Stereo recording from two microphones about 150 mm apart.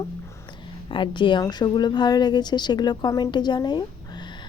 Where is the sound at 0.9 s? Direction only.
35° left (ahead or behind).